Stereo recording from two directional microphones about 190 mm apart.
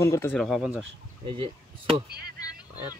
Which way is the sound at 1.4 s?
25° right (ahead or behind).